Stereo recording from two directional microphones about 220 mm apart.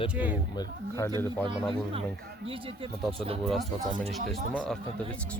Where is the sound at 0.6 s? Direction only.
15° left (ahead or behind).